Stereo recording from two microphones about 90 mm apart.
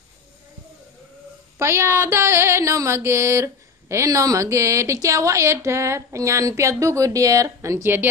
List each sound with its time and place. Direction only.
1.6 s music: 30° right (ahead or behind)